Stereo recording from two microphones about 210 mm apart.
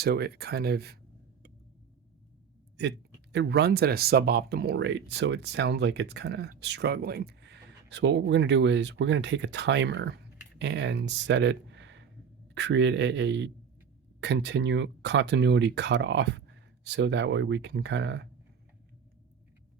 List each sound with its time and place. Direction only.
0.0 s speech: 50° right (ahead or behind)
2.8 s a man's voice: 55° right (ahead or behind)